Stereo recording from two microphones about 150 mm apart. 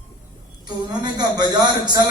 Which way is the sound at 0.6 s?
30° right (ahead or behind).